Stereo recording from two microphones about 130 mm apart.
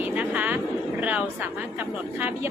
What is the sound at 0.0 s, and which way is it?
Vehicle, 10° right (ahead or behind).